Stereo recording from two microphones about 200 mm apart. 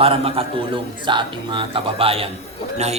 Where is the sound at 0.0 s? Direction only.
30° right (ahead or behind).